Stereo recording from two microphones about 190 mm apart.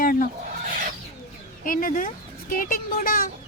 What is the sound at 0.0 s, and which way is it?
Fowl, 50° left (ahead or behind).